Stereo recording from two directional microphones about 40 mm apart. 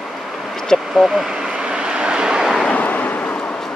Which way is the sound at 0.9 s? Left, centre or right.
Centre.